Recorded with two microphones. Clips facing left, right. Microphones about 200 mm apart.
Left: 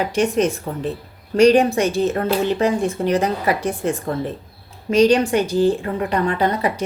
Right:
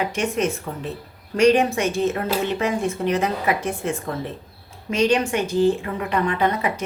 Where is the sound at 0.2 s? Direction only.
35° left (ahead or behind).